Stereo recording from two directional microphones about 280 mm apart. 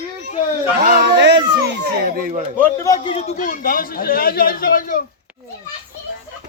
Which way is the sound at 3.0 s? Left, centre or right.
Left.